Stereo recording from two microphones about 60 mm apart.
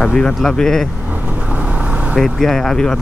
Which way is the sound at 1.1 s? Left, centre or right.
Right.